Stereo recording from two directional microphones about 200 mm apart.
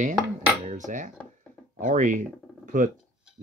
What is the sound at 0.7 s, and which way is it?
Cutlery, 40° right (ahead or behind).